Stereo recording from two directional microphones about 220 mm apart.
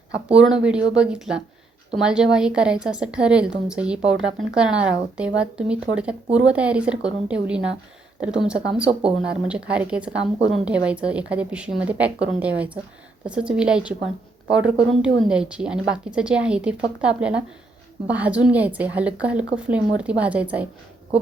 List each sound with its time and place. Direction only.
0.3 s a woman's voice: 5° right (ahead or behind)
8.9 s speech: 25° right (ahead or behind)
9.3 s a woman's voice: 5° right (ahead or behind)